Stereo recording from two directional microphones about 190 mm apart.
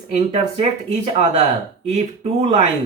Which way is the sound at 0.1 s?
35° right (ahead or behind).